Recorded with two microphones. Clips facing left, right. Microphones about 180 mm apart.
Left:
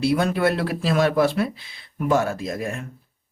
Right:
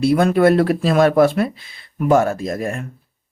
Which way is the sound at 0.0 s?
50° right (ahead or behind).